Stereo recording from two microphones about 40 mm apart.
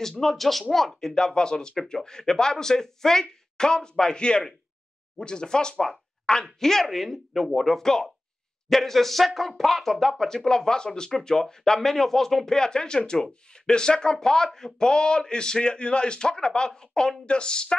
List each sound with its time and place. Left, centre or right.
0.2 s speech: centre
6.9 s speech: centre; by 17.7 s left